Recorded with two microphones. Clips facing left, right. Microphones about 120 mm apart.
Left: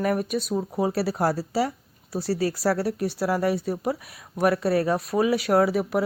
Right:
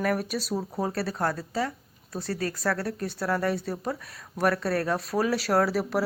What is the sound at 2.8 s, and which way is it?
Speech, 5° left (ahead or behind).